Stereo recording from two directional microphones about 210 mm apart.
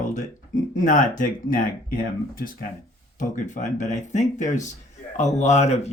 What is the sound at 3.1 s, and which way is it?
Speech, 35° left (ahead or behind).